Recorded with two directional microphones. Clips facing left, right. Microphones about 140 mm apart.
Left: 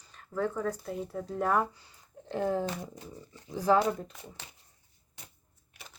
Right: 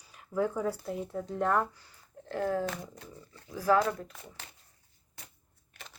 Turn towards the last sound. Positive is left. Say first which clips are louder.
# left 1 dB
turn(degrees=20)  # may be behind; listen again after turning